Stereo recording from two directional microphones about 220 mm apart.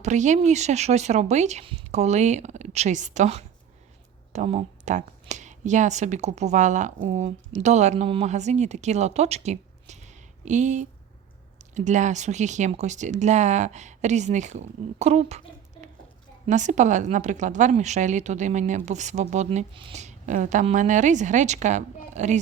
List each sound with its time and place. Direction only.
0.0 s a woman's voice: 35° right (ahead or behind)
16.5 s a woman's voice: 35° right (ahead or behind)